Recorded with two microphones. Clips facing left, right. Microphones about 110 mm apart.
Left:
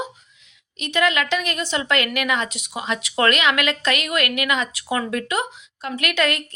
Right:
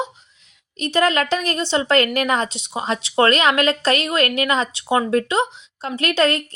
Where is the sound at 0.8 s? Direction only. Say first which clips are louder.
Right 3 dB; 35° right (ahead or behind).